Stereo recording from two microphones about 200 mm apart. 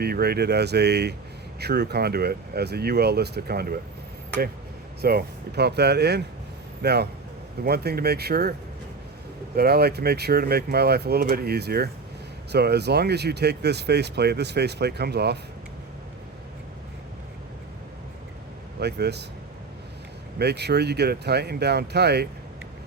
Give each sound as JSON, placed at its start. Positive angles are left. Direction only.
{"t": 0.0, "sound": "speech", "side_deg": -50}
{"t": 5.0, "sound": "speech", "side_deg": -55}
{"t": 9.6, "sound": "speech", "side_deg": -50}
{"t": 18.8, "sound": "speech", "side_deg": -55}
{"t": 20.4, "sound": "speech", "side_deg": -55}